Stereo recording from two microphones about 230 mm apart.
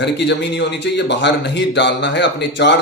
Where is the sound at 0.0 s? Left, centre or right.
Left.